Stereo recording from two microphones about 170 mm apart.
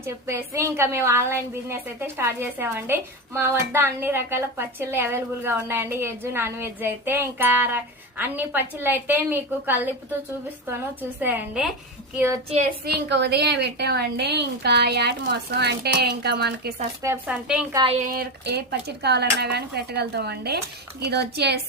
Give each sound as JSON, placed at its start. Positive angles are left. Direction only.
{"t": 0.0, "sound": "a woman's voice", "side_deg": -15}
{"t": 11.2, "sound": "a woman's voice", "side_deg": -10}
{"t": 12.8, "sound": "a woman's voice", "side_deg": -80}
{"t": 17.2, "sound": "a woman's voice", "side_deg": -5}
{"t": 17.7, "sound": "speech", "side_deg": -35}
{"t": 18.0, "sound": "a woman's voice", "side_deg": -60}